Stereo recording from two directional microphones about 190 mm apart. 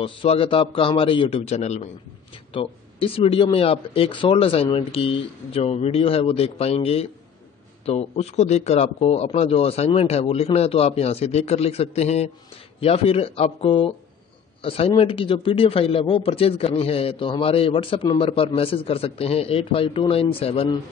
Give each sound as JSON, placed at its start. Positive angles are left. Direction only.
{"t": 0.0, "sound": "a man's voice", "side_deg": 30}